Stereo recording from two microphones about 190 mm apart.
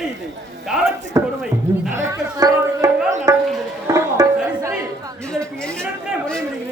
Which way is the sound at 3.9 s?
15° right (ahead or behind).